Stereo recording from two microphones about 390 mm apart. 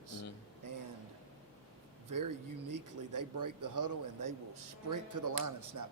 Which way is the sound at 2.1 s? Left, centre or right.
Right.